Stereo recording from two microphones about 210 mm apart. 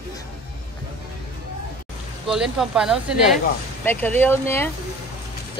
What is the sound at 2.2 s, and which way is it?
Speech, centre (ahead or behind).